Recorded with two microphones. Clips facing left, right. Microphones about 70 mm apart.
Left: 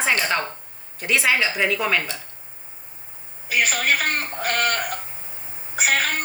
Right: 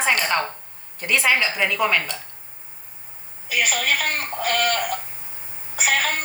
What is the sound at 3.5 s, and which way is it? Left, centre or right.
Speech, left.